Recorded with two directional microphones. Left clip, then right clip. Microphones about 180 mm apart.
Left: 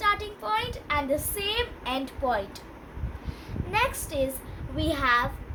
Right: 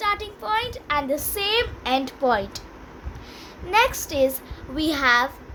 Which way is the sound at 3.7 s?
65° right (ahead or behind).